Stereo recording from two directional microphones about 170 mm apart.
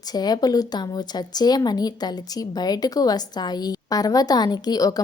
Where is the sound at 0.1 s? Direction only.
25° left (ahead or behind).